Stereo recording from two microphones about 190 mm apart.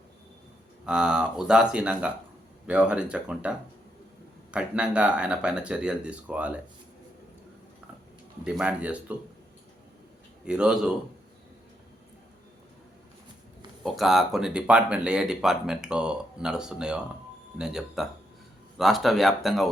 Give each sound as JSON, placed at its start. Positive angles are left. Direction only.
{"t": 0.9, "sound": "speech", "side_deg": -5}
{"t": 4.5, "sound": "speech", "side_deg": -5}
{"t": 8.4, "sound": "speech", "side_deg": -5}
{"t": 10.4, "sound": "speech", "side_deg": -5}
{"t": 13.8, "sound": "speech", "side_deg": 0}